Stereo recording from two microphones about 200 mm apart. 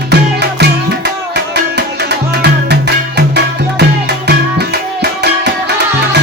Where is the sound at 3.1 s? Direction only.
55° right (ahead or behind).